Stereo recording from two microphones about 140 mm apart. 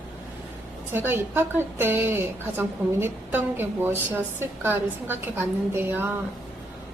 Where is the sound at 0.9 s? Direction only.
15° right (ahead or behind).